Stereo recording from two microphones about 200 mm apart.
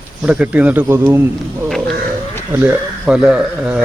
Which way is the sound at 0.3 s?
5° right (ahead or behind).